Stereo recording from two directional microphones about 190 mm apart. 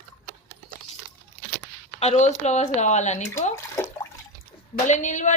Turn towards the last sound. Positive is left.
turn(degrees=40)  # may be behind; listen again after turning